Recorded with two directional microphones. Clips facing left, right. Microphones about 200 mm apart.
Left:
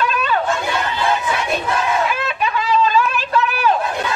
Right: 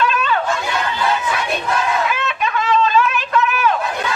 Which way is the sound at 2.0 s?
35° left (ahead or behind).